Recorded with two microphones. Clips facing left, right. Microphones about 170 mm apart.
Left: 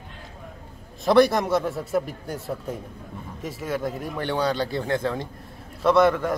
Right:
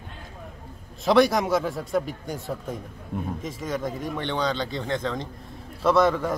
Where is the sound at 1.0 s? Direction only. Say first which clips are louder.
Left 1 dB; centre (ahead or behind).